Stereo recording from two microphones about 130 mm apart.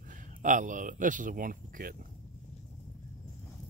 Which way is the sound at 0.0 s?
90° right.